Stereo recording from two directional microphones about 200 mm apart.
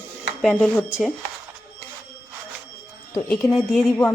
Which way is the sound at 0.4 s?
Centre (ahead or behind).